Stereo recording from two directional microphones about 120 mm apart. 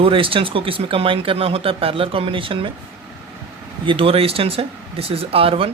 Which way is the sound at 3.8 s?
45° right (ahead or behind).